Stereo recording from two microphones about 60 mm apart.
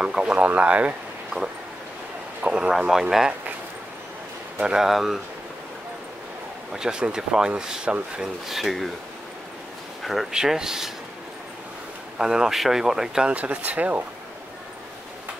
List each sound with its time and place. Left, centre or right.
0.2 s a sound: centre
0.5 s speech: right
2.4 s speech: centre
4.6 s speech: centre
6.7 s speech: centre
10.0 s speech: centre
12.2 s speech: centre
13.3 s speech: right